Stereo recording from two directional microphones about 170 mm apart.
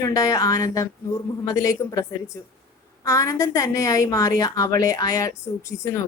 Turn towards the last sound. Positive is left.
turn(degrees=15)  # may be behind; listen again after turning